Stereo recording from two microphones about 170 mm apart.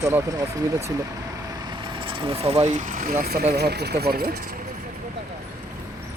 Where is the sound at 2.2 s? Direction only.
35° right (ahead or behind); by 3.4 s 60° right (ahead or behind).